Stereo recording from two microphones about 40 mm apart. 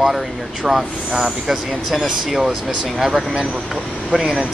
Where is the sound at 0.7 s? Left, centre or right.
Centre.